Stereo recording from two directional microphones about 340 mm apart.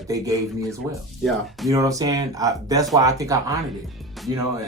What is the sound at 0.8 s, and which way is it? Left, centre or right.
Speech, centre.